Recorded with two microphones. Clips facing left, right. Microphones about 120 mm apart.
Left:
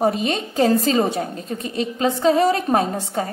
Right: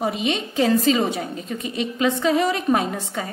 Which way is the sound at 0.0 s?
40° left (ahead or behind).